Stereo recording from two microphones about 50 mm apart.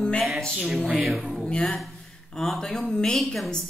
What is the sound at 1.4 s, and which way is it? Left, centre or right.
Speech, centre.